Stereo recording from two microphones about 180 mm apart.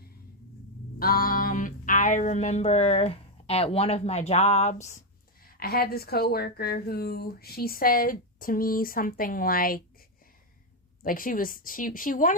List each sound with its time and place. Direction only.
0.9 s speech: 55° left (ahead or behind)
5.5 s a woman's voice: 55° left (ahead or behind)
11.0 s a woman's voice: 50° left (ahead or behind)